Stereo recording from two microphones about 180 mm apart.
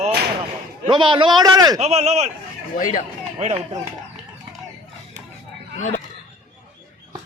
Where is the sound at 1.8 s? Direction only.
35° right (ahead or behind).